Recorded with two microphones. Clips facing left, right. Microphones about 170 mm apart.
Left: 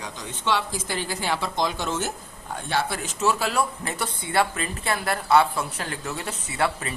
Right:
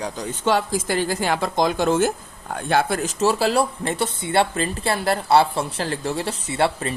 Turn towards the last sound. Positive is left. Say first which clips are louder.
# right 5 dB
turn(degrees=-30)  # may be behind; listen again after turning